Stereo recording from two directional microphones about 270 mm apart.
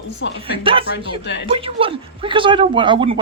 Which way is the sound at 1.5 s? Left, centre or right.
Centre.